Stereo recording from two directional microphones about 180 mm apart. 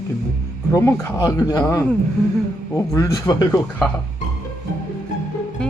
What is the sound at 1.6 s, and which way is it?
Speech, 10° left (ahead or behind).